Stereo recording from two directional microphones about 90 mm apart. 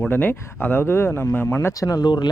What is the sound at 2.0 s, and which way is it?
Speech, 55° left (ahead or behind).